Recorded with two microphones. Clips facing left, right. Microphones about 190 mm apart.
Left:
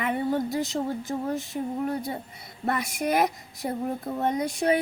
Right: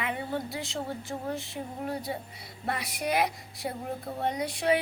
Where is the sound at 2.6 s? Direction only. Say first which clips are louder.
Left 5 dB; 45° left (ahead or behind).